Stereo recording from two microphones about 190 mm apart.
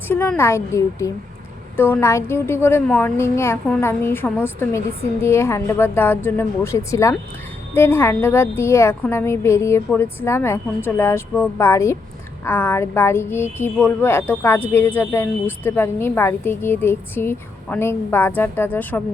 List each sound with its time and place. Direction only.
0.1 s speech: 10° left (ahead or behind)